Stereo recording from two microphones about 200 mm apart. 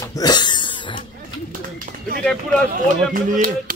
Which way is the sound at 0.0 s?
20° left (ahead or behind).